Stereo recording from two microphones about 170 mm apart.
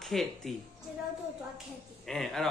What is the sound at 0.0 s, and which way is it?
Speech, centre (ahead or behind).